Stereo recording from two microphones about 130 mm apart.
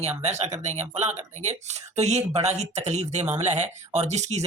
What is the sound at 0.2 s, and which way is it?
Speech, 60° right (ahead or behind).